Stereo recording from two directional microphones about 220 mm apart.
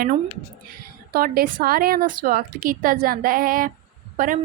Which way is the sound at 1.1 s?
45° right (ahead or behind).